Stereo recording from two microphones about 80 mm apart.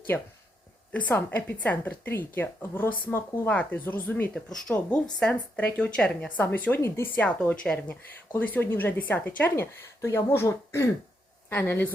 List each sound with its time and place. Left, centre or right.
0.1 s speech: left
4.4 s speech: centre
5.3 s speech: centre
6.8 s speech: left
7.2 s speech: centre
9.6 s a woman's voice: left